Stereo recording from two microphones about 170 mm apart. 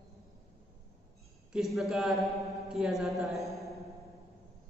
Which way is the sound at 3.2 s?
Centre (ahead or behind).